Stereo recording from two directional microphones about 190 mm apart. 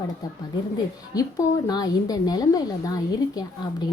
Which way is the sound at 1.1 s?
20° left (ahead or behind).